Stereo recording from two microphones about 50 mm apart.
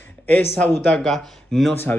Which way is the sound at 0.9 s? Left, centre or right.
Centre.